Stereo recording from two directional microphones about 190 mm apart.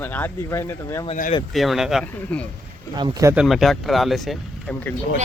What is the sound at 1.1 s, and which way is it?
Speech, 40° left (ahead or behind).